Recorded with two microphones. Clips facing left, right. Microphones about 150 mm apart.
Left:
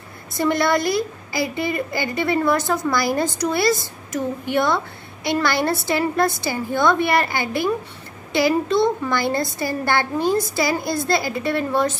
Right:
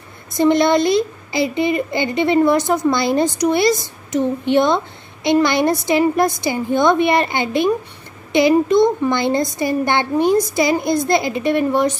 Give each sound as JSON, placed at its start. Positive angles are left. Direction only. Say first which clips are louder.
{"t": 0.4, "sound": "a child's voice", "louder": "right 6 dB", "side_deg": -20}